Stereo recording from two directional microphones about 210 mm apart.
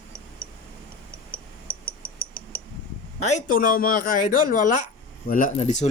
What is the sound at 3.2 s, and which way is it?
Speech, 35° left (ahead or behind).